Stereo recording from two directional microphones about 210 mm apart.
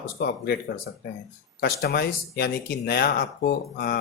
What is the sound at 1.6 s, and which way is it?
Speech, 50° left (ahead or behind).